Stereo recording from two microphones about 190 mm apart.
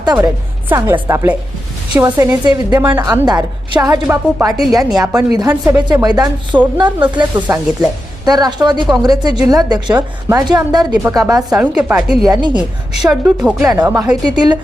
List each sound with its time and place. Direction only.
0.0 s a woman's voice: 20° right (ahead or behind)
2.7 s a woman's voice: 10° right (ahead or behind)
3.0 s speech: 20° right (ahead or behind)
4.0 s a woman's voice: 10° right (ahead or behind)
11.4 s a woman's voice: 5° right (ahead or behind); by 14.6 s 20° right (ahead or behind)